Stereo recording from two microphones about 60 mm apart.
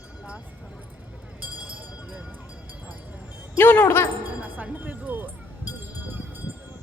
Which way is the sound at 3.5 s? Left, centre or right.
Left.